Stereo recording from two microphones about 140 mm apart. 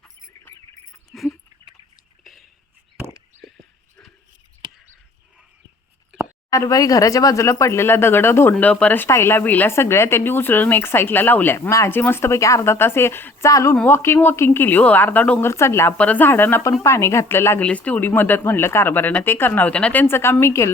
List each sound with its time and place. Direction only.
1.1 s bird: centre (ahead or behind)
4.6 s a sound: 30° right (ahead or behind)
6.5 s speech: 25° left (ahead or behind)